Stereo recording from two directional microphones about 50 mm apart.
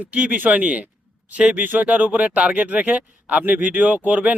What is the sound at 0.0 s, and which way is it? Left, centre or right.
Speech, right.